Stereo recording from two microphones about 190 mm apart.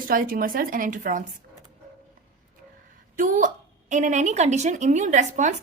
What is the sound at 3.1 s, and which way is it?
A woman's voice, 45° right (ahead or behind).